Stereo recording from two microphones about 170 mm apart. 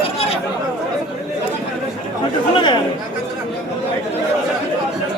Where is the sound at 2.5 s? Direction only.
25° left (ahead or behind).